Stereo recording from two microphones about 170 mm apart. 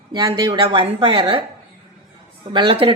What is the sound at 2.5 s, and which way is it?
Speech, 30° right (ahead or behind).